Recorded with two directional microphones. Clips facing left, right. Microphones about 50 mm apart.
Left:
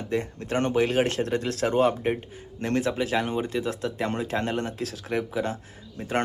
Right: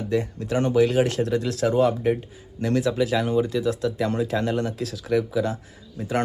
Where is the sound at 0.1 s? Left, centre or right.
Left.